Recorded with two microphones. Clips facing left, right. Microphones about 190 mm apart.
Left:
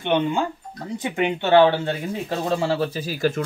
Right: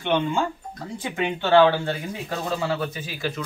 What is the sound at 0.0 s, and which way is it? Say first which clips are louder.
Speech: left 2 dB; 20° left (ahead or behind).